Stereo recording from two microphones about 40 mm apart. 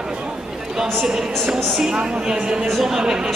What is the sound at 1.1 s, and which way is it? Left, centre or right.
A man's voice, centre.